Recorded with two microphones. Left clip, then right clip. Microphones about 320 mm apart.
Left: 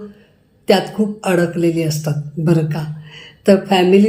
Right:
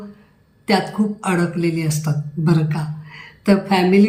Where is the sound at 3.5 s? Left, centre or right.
Right.